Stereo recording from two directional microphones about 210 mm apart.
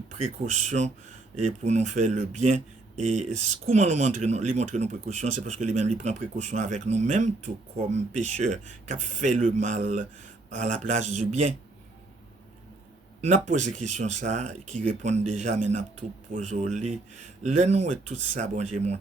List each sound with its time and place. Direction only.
0.2 s speech: 35° right (ahead or behind)
13.2 s speech: 35° right (ahead or behind)